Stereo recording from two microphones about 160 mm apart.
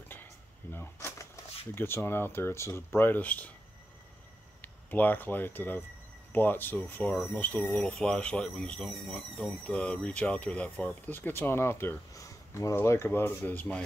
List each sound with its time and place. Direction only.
0.7 s a sound: 15° left (ahead or behind)
1.8 s speech: 15° left (ahead or behind)
4.6 s speech: 10° left (ahead or behind)